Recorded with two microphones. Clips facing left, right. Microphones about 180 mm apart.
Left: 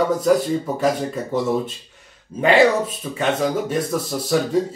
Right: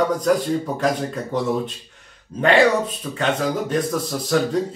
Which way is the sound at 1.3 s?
5° left (ahead or behind).